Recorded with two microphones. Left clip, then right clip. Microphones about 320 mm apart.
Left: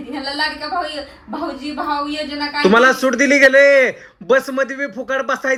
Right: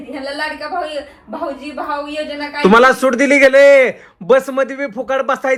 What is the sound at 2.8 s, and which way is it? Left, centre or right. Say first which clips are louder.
A man's voice: right 2 dB; centre.